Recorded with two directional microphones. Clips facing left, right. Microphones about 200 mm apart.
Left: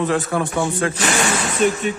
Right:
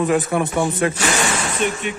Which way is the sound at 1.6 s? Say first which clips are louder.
Left 5 dB; 40° left (ahead or behind).